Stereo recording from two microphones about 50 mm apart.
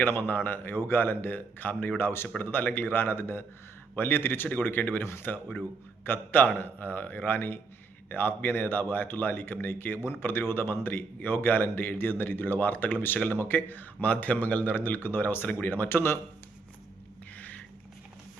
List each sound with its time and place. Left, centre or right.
0.0 s a man's voice: left
5.3 s a man's voice: left
13.1 s speech: left
13.4 s a man's voice: left
17.3 s a sound: left